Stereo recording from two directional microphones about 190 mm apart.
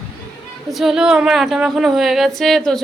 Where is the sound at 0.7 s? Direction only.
Centre (ahead or behind).